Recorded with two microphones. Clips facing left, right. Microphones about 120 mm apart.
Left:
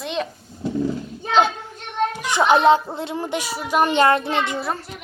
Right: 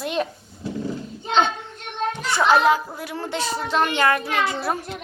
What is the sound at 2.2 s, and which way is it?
A child's voice, 20° left (ahead or behind).